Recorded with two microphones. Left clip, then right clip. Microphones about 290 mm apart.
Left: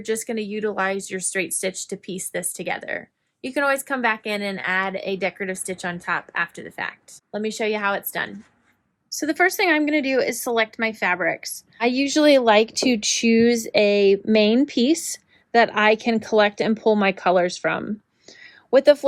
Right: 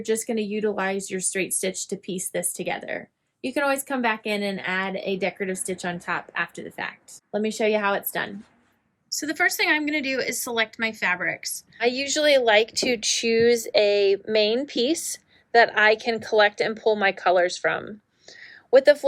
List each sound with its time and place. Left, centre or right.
0.0 s a woman's voice: centre
11.8 s a woman's voice: centre
16.8 s speech: left